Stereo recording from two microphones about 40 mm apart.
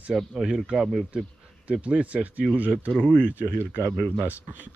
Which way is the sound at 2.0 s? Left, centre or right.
Right.